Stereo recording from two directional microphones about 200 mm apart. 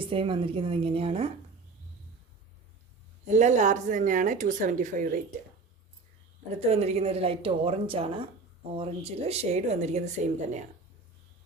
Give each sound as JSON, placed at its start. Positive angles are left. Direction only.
{"t": 0.0, "sound": "speech", "side_deg": -25}
{"t": 3.2, "sound": "speech", "side_deg": -35}
{"t": 6.6, "sound": "speech", "side_deg": -30}